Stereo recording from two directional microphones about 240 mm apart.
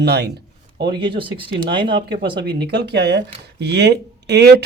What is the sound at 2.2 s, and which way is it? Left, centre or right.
Speech, right.